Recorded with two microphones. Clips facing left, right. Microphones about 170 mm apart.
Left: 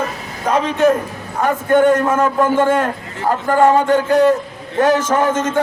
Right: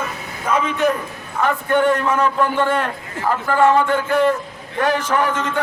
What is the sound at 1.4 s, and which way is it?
A man's voice, 45° left (ahead or behind).